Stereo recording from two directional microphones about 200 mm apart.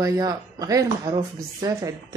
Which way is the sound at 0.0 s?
15° right (ahead or behind).